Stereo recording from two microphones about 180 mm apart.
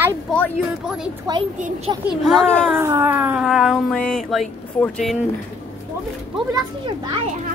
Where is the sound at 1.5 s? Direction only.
45° right (ahead or behind).